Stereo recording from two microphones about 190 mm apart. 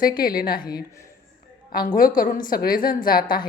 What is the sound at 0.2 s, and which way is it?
Speech, 50° left (ahead or behind).